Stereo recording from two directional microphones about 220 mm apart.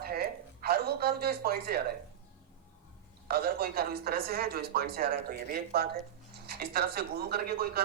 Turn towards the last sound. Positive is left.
turn(degrees=-45)  # may be behind; listen again after turning